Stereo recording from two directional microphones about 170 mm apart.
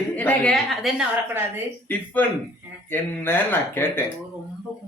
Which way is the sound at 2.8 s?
10° left (ahead or behind).